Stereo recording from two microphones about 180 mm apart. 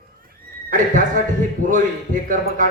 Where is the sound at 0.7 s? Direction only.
45° right (ahead or behind).